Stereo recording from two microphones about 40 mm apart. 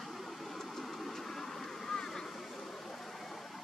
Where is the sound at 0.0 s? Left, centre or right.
Centre.